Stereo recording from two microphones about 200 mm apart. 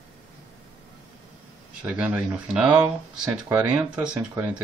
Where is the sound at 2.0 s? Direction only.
10° right (ahead or behind).